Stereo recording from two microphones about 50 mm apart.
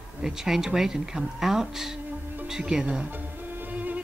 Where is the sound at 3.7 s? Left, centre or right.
Right.